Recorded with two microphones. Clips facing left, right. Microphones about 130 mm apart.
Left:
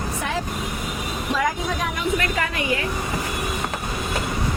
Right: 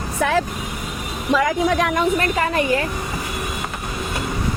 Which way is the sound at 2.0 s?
35° right (ahead or behind).